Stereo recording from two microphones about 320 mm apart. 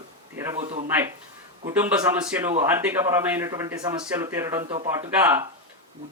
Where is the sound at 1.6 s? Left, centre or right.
Centre.